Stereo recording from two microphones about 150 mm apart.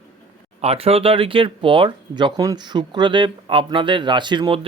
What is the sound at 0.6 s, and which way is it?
Speech, 40° right (ahead or behind).